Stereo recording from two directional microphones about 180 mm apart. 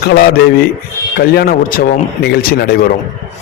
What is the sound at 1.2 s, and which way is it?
A man's voice, 60° left (ahead or behind).